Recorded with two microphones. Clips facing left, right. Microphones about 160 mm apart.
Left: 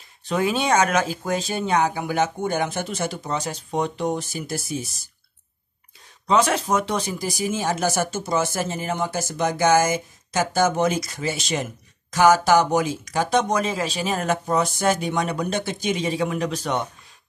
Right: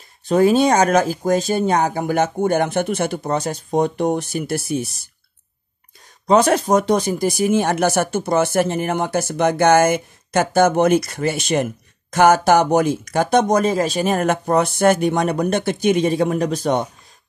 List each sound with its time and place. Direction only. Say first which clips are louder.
0.2 s speech: right 9 dB; 40° right (ahead or behind); by 5.0 s 60° right (ahead or behind)
6.2 s speech: right 5 dB; 40° right (ahead or behind)